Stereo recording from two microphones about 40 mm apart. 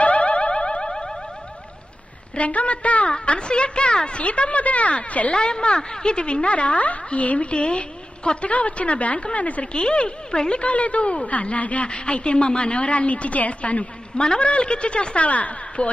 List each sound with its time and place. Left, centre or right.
0.0 s car alarm: left; by 1.1 s centre
2.3 s a woman's voice: left
5.3 s a woman's voice: left
11.9 s a woman's voice: left